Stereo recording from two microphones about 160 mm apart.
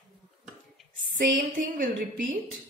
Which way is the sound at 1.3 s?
55° right (ahead or behind).